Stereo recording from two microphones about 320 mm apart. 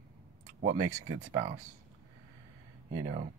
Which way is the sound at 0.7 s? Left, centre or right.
Right.